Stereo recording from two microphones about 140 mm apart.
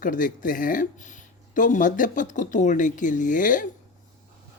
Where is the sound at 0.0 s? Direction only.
75° left (ahead or behind).